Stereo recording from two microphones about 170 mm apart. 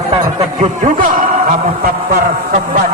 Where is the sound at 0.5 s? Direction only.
50° right (ahead or behind).